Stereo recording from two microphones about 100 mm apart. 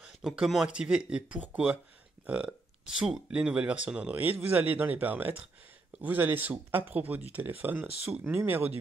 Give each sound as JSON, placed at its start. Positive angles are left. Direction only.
{"t": 0.0, "sound": "speech", "side_deg": -5}